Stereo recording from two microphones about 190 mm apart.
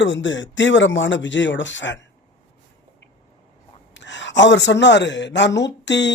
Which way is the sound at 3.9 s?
70° left (ahead or behind).